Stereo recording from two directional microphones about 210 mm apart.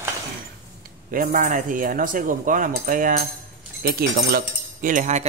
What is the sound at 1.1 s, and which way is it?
Speech, 40° right (ahead or behind).